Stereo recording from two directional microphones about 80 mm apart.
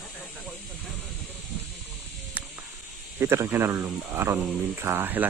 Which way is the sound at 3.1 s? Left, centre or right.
Right.